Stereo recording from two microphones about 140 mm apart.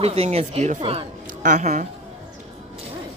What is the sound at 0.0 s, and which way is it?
Speech, 45° right (ahead or behind).